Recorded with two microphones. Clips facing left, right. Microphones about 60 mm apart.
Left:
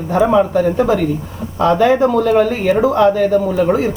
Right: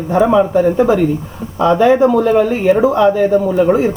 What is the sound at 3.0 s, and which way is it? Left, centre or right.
Speech, centre.